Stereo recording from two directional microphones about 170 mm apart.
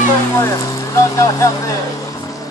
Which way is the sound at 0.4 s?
20° left (ahead or behind).